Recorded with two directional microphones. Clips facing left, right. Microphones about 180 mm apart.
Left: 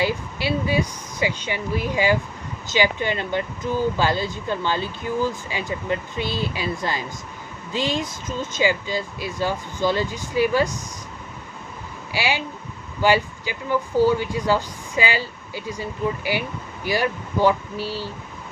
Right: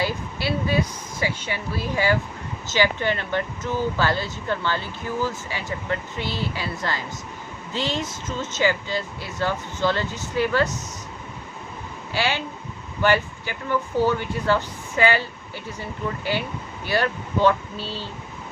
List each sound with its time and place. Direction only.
0.0 s speech: 15° left (ahead or behind)
12.1 s speech: 10° left (ahead or behind)